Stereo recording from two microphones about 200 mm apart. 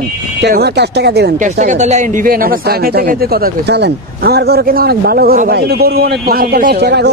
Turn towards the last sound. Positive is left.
turn(degrees=-55)  # may be behind; listen again after turning